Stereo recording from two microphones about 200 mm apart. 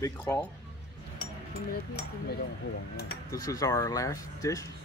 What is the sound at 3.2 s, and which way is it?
Speech, 15° left (ahead or behind).